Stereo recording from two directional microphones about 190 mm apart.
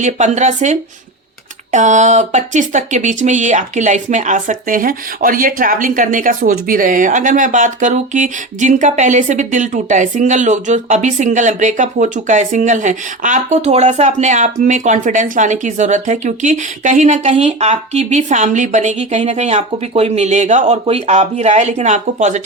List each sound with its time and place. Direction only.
0.0 s speech: 40° right (ahead or behind)